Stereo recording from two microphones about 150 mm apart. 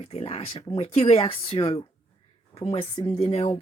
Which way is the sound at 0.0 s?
40° left (ahead or behind).